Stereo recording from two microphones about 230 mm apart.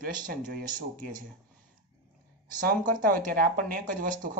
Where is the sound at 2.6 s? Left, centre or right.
Right.